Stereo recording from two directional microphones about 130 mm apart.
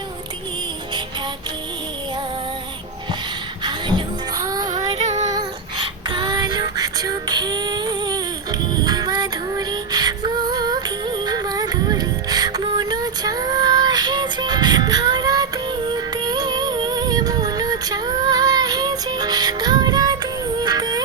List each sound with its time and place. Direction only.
3.6 s music: 35° right (ahead or behind)
4.9 s music: 60° right (ahead or behind)
5.3 s child singing: 35° right (ahead or behind)
8.8 s music: 30° right (ahead or behind)